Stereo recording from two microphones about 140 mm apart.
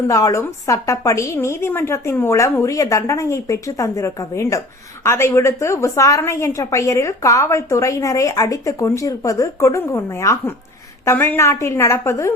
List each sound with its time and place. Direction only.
0.1 s a woman's voice: 25° left (ahead or behind)